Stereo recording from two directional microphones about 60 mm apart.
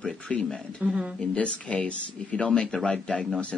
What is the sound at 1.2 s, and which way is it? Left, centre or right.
Speech, centre.